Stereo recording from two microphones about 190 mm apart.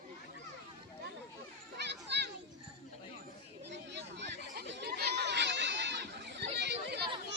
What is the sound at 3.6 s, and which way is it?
Chatter, 65° right (ahead or behind).